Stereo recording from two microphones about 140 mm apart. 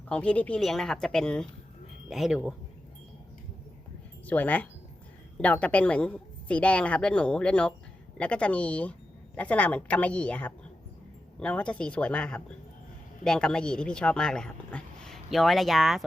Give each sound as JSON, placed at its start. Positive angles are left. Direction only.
{"t": 0.1, "sound": "speech", "side_deg": 10}
{"t": 4.3, "sound": "a woman's voice", "side_deg": 10}